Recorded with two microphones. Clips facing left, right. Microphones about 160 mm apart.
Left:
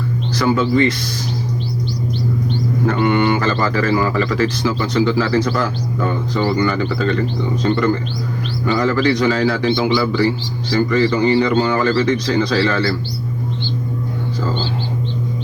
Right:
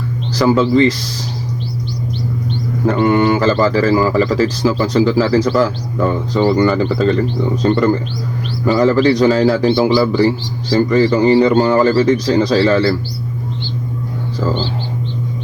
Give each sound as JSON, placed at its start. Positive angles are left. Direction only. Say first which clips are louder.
{"t": 0.3, "sound": "a man's voice", "louder": "right 4 dB", "side_deg": -30}
{"t": 2.8, "sound": "a man's voice", "louder": "right 4 dB", "side_deg": -35}
{"t": 8.6, "sound": "a man's voice", "louder": "right 5 dB", "side_deg": -35}